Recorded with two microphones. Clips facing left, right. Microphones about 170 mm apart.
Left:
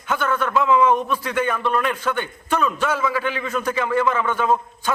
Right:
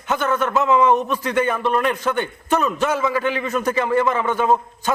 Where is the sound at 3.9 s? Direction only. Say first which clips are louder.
Even; 15° right (ahead or behind).